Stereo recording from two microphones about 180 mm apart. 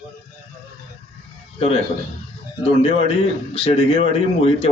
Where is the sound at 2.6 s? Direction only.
30° left (ahead or behind).